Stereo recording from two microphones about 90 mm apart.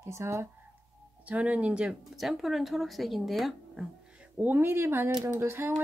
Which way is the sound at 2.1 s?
Centre (ahead or behind).